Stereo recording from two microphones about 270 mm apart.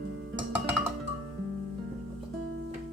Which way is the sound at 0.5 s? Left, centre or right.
Centre.